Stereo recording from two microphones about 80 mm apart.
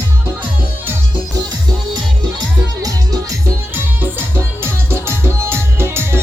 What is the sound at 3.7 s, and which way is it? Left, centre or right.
Music, right.